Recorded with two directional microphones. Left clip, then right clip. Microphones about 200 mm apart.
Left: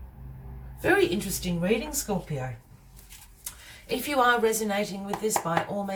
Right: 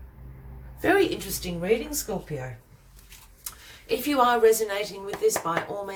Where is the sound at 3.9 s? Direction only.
45° right (ahead or behind).